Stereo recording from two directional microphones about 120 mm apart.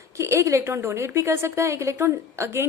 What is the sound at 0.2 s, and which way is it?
A woman's voice, 25° right (ahead or behind).